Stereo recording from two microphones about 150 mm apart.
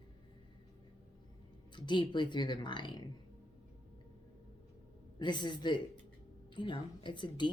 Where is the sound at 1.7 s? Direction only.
30° left (ahead or behind).